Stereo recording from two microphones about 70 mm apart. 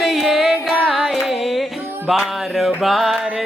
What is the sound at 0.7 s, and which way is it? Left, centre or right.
Music, centre.